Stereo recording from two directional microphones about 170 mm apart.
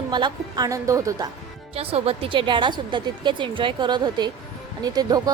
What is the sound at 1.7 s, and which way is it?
Speech, 35° right (ahead or behind).